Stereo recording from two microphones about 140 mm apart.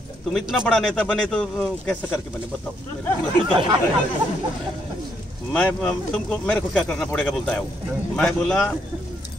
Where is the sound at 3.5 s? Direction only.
35° right (ahead or behind).